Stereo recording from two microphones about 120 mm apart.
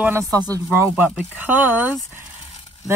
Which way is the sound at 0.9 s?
15° right (ahead or behind).